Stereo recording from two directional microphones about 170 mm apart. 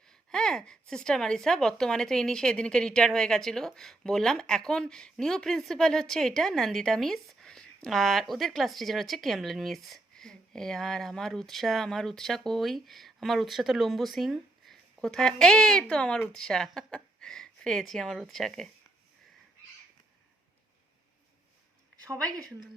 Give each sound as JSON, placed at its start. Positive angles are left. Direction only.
{"t": 0.1, "sound": "speech", "side_deg": 5}
{"t": 22.3, "sound": "a woman's voice", "side_deg": -20}